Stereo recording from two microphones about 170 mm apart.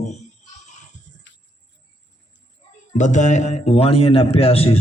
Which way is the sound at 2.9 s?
45° left (ahead or behind).